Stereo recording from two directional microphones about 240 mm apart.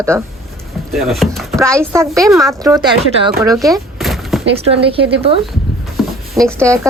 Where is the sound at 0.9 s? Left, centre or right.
Centre.